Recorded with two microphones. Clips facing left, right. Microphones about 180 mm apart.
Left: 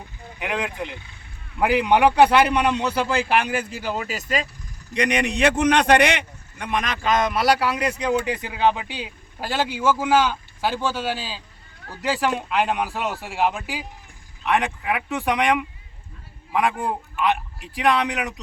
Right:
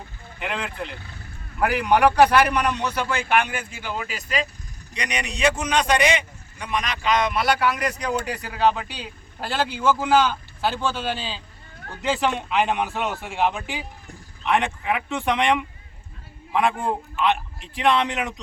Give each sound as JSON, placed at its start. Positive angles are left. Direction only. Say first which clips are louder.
{"t": 0.3, "sound": "a man's voice", "louder": "left 2 dB", "side_deg": 10}